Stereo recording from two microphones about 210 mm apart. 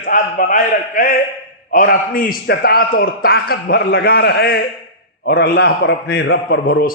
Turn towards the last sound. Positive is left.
turn(degrees=50)  # may be behind; listen again after turning